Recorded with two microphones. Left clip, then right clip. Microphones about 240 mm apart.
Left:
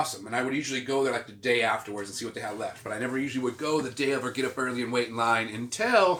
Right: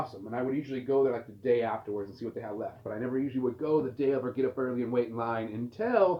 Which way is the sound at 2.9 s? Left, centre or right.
Left.